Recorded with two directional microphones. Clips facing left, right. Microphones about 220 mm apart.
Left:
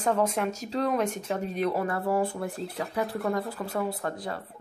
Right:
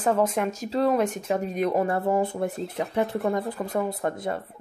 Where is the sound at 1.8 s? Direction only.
25° right (ahead or behind).